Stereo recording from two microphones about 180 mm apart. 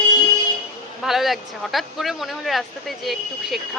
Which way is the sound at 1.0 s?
Centre (ahead or behind).